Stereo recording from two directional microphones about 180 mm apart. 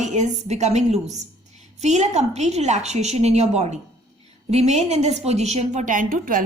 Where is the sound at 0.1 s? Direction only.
40° right (ahead or behind).